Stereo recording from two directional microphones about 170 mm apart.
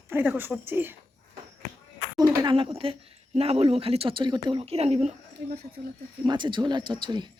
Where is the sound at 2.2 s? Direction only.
25° right (ahead or behind).